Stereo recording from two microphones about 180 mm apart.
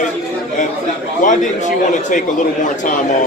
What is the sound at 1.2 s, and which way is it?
Speech, 45° left (ahead or behind).